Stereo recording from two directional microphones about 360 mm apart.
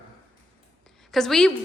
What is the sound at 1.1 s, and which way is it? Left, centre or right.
Speech, centre.